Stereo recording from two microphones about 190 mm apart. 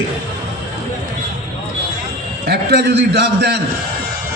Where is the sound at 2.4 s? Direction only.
60° right (ahead or behind).